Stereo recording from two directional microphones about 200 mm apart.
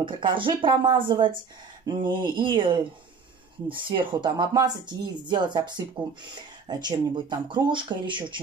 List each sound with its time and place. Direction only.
0.0 s speech: 25° right (ahead or behind)